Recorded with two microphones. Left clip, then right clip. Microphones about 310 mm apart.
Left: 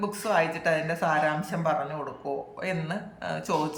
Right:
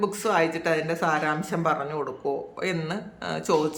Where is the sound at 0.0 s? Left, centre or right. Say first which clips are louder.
Right 2 dB; centre.